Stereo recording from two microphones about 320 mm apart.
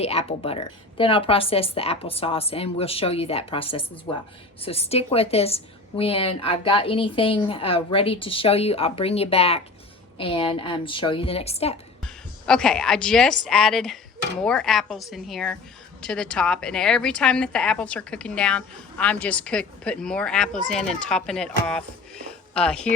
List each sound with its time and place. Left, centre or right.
0.0 s speech: centre
12.0 s a woman's voice: centre